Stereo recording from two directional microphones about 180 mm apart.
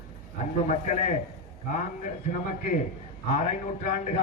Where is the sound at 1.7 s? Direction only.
45° left (ahead or behind).